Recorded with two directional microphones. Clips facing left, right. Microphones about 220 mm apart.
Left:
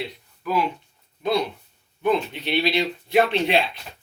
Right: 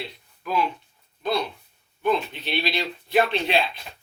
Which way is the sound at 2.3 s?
15° left (ahead or behind).